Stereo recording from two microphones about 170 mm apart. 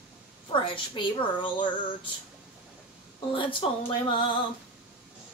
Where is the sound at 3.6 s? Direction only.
35° left (ahead or behind).